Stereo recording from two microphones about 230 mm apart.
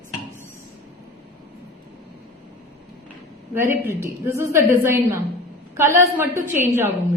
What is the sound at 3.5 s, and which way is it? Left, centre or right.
A woman's voice, centre.